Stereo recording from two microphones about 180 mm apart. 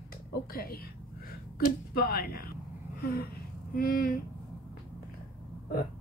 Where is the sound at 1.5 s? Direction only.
55° left (ahead or behind).